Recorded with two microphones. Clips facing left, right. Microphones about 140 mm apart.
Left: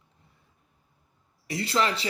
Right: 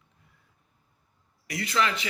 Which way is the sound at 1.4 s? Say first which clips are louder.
Left 1 dB; 30° left (ahead or behind).